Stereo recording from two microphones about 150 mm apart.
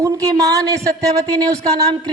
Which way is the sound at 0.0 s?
20° right (ahead or behind).